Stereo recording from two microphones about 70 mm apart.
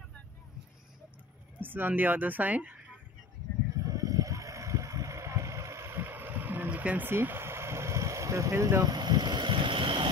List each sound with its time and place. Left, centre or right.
1.6 s speech: right
3.9 s boat: right
7.1 s a sound: right
8.8 s vehicle: right